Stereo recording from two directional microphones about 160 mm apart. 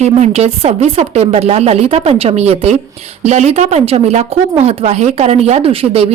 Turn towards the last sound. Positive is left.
turn(degrees=-35)  # may be behind; listen again after turning